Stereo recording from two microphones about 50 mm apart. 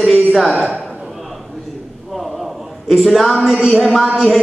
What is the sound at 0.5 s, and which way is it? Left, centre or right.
Speech, centre.